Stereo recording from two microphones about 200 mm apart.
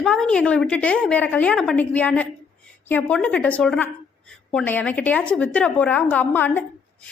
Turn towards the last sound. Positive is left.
turn(degrees=10)  # may be behind; listen again after turning